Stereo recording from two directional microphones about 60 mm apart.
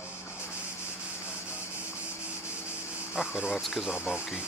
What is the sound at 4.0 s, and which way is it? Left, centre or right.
Speech, centre.